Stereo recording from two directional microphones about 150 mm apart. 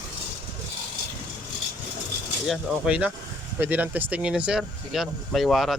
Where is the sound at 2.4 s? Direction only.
5° right (ahead or behind).